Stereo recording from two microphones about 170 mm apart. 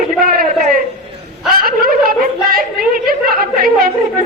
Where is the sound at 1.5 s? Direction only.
60° right (ahead or behind).